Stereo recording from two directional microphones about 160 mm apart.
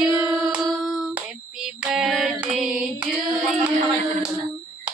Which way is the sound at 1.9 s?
Centre (ahead or behind).